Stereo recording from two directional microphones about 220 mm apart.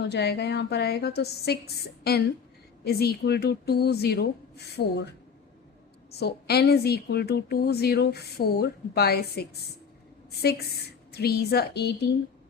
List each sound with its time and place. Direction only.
0.1 s a woman's voice: 50° left (ahead or behind)
6.1 s a woman's voice: 45° left (ahead or behind)